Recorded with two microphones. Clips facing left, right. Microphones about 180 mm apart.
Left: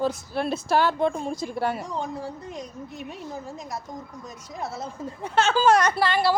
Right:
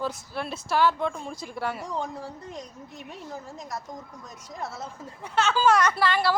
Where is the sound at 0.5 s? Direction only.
30° left (ahead or behind).